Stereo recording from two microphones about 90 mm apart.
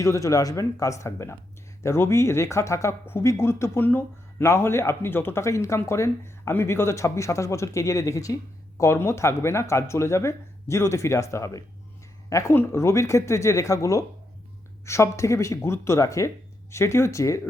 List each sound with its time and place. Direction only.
0.0 s speech: 35° left (ahead or behind)